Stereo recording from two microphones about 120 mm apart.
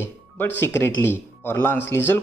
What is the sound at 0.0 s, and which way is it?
Speech, 15° left (ahead or behind).